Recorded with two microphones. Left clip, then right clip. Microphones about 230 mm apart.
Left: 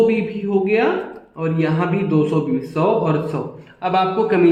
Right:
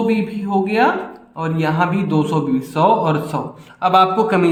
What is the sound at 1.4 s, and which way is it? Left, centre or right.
Speech, right.